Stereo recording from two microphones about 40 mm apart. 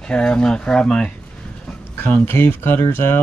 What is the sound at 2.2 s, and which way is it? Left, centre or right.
Speech, left.